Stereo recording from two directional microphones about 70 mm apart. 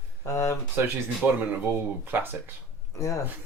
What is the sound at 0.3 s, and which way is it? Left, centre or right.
Speech, left.